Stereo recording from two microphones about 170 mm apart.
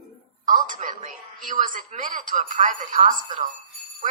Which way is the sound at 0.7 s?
45° right (ahead or behind).